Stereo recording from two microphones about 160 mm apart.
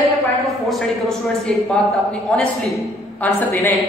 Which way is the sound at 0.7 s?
Centre (ahead or behind).